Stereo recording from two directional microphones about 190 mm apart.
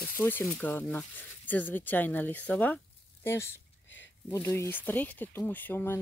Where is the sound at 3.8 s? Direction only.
75° left (ahead or behind).